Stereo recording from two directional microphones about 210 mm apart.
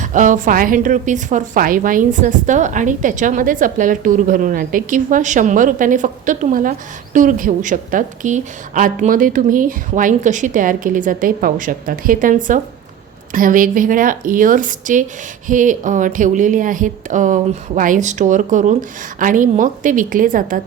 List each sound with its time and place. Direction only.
0.0 s a woman's voice: 35° right (ahead or behind)